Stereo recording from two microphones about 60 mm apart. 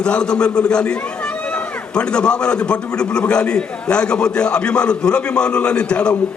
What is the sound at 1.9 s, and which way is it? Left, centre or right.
A man's voice, centre.